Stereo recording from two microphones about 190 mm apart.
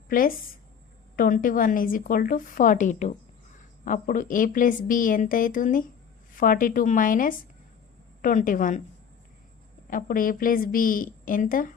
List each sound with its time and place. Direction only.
0.1 s a woman's voice: 45° left (ahead or behind)
9.9 s a woman's voice: 45° left (ahead or behind)